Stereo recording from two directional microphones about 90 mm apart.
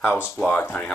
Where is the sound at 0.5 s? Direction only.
20° left (ahead or behind).